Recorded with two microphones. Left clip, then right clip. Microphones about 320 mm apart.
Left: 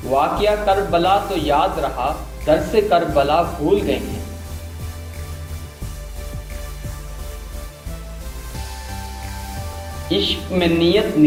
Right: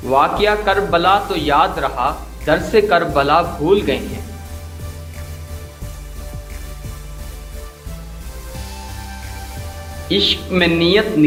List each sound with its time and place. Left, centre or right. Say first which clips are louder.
0.2 s a man's voice: right 3 dB; right
10.1 s a man's voice: right 4 dB; right